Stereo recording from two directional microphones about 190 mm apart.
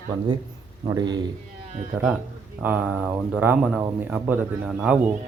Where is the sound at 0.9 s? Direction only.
20° right (ahead or behind).